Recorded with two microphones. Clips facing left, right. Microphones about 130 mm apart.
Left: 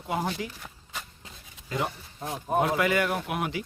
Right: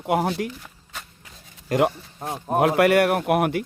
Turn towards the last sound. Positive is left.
turn(degrees=-60)  # may be behind; listen again after turning